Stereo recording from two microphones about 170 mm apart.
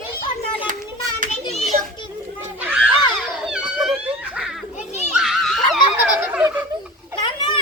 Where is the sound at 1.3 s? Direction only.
40° left (ahead or behind).